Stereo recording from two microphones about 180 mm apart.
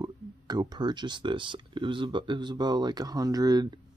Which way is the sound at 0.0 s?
20° right (ahead or behind).